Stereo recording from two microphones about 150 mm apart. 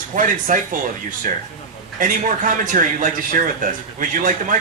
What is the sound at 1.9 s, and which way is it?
Speech, 60° right (ahead or behind).